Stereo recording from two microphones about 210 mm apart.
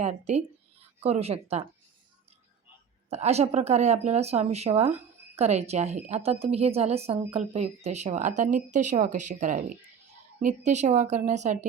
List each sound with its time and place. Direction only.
0.0 s a woman's voice: 30° right (ahead or behind)
3.1 s a woman's voice: 30° right (ahead or behind)